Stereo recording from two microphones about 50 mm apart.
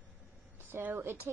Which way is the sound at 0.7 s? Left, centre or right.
Right.